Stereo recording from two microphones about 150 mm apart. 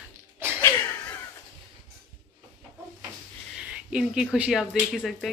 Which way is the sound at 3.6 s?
5° right (ahead or behind).